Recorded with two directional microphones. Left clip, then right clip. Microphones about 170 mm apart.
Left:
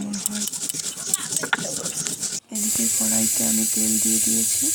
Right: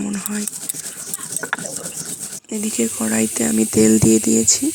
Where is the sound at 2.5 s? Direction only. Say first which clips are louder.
Right 4 dB; 40° right (ahead or behind).